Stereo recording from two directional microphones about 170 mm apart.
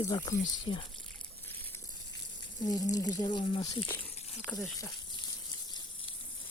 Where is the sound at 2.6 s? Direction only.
20° left (ahead or behind).